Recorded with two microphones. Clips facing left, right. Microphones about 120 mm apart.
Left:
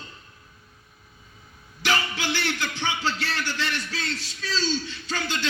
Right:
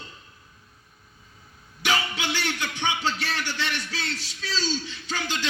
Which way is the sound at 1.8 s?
20° right (ahead or behind).